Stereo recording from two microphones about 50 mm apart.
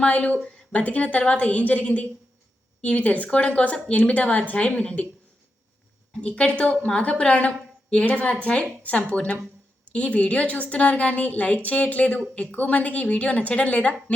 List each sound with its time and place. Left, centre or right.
0.0 s a woman's voice: left
6.2 s a woman's voice: left